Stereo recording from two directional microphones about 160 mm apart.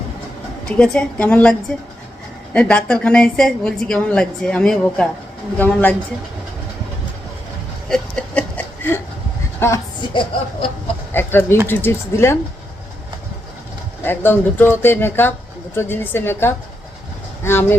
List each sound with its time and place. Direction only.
0.6 s a woman's voice: 5° left (ahead or behind)
7.9 s a sound: 5° left (ahead or behind)
9.6 s speech: 15° left (ahead or behind)
10.0 s speech: 30° left (ahead or behind)
11.1 s speech: 15° left (ahead or behind)
14.0 s speech: 15° left (ahead or behind)